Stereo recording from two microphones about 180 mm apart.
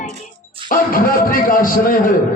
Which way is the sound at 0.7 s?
50° left (ahead or behind).